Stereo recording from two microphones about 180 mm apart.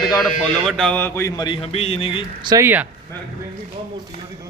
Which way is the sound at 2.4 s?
25° right (ahead or behind).